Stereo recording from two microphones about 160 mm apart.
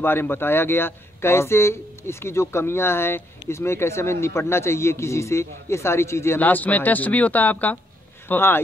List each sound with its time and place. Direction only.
0.0 s speech: 15° left (ahead or behind)